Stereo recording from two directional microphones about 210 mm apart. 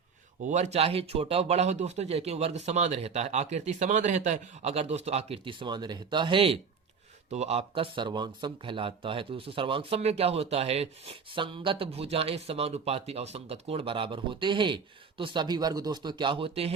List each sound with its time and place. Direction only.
0.4 s speech: 35° right (ahead or behind)